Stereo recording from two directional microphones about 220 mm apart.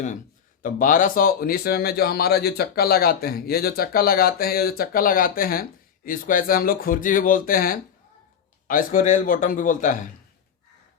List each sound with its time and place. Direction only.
0.6 s speech: 40° left (ahead or behind)